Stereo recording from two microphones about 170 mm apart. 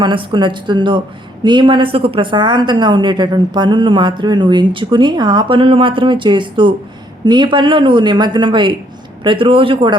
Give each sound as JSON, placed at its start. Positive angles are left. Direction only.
{"t": 0.0, "sound": "a woman's voice", "side_deg": -30}